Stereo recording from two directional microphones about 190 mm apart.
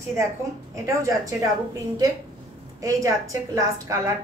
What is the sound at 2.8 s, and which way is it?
A woman's voice, 15° right (ahead or behind).